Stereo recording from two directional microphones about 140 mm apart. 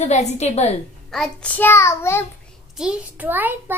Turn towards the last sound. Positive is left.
turn(degrees=-15)  # may be behind; listen again after turning